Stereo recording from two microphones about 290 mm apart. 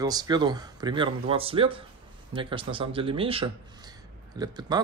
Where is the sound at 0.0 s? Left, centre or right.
Centre.